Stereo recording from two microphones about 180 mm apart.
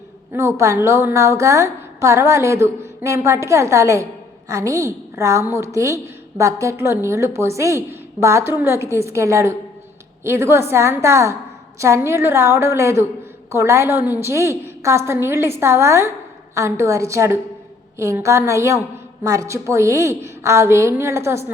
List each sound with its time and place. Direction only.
0.3 s a woman's voice: 15° right (ahead or behind)